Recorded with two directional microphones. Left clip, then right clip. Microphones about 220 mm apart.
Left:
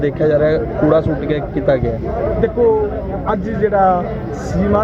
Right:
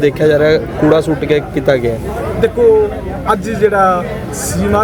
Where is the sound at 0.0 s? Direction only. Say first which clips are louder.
Right 4 dB; 45° right (ahead or behind).